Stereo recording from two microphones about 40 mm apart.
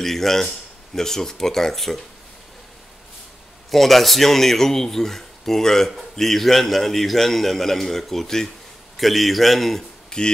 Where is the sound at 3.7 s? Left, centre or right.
Centre.